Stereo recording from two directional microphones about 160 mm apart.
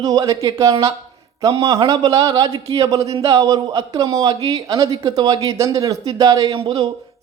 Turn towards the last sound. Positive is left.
turn(degrees=-35)  # may be behind; listen again after turning